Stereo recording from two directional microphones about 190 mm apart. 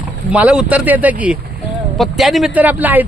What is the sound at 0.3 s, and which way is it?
Speech, 5° right (ahead or behind).